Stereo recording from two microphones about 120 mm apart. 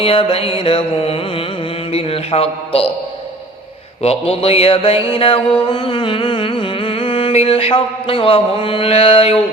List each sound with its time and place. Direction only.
0.0 s music: 50° left (ahead or behind)
4.0 s music: 55° left (ahead or behind)
5.6 s a sound: 50° left (ahead or behind)